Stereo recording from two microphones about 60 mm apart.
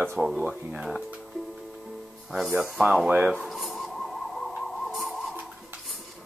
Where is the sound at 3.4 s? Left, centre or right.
Centre.